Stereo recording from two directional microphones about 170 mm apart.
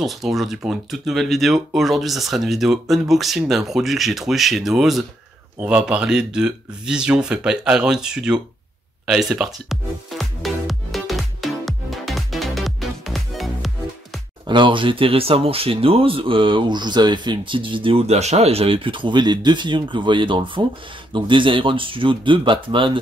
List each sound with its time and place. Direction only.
0.0 s speech: centre (ahead or behind)
9.0 s music: centre (ahead or behind)
14.4 s speech: 30° right (ahead or behind)